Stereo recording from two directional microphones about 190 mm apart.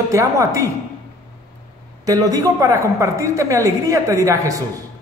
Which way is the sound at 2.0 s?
20° right (ahead or behind).